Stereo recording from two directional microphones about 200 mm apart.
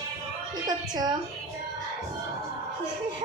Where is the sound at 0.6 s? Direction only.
20° right (ahead or behind).